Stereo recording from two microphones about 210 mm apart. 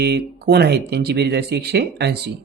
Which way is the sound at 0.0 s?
50° right (ahead or behind).